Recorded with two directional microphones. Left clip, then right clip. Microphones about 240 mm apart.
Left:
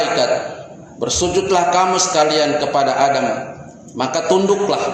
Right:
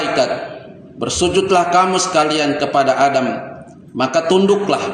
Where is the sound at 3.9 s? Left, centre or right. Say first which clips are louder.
Right 2 dB; right.